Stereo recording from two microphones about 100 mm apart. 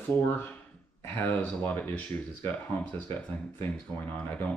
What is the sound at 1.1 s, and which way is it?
Speech, 20° left (ahead or behind).